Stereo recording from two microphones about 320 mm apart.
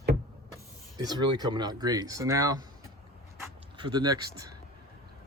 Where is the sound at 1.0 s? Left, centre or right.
Centre.